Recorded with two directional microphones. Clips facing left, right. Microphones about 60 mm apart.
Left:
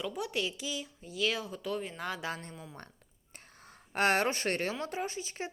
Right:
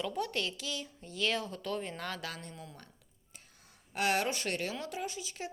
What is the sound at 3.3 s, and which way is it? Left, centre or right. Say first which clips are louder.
Speech: left 6 dB; left.